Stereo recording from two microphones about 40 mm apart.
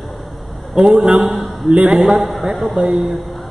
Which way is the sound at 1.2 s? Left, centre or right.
Centre.